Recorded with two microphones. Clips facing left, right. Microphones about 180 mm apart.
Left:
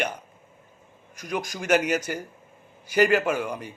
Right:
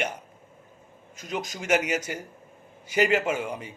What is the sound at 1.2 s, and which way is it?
A man's voice, 25° right (ahead or behind).